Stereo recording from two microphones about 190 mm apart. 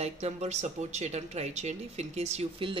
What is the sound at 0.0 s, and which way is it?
Speech, 35° right (ahead or behind).